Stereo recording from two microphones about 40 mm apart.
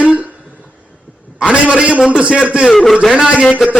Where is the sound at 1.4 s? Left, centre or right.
Right.